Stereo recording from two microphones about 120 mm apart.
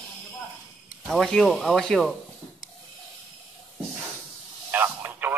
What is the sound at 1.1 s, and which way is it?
Speech, 5° left (ahead or behind).